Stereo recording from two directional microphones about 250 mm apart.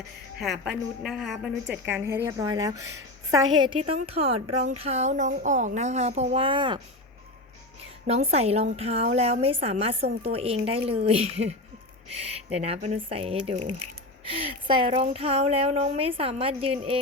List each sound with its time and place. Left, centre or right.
0.3 s a woman's voice: centre
8.0 s speech: right
13.6 s speech: right
14.3 s speech: right